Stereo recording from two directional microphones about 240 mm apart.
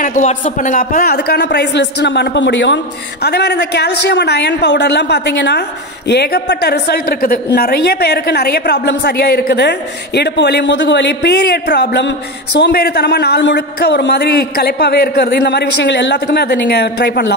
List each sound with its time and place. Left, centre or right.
0.0 s a woman's voice: left